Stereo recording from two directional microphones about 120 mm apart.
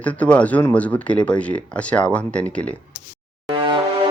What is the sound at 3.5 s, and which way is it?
Music, 40° right (ahead or behind).